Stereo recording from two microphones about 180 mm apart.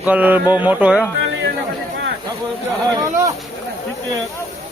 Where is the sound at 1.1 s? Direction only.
90° right.